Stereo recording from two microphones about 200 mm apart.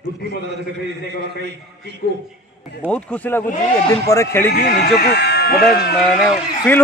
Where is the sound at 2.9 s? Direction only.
10° left (ahead or behind).